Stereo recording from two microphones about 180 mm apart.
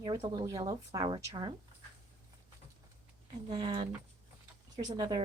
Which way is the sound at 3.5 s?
25° right (ahead or behind).